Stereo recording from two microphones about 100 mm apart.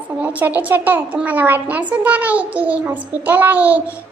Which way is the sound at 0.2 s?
20° right (ahead or behind).